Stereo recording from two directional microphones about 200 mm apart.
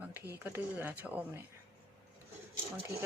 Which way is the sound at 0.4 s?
10° right (ahead or behind).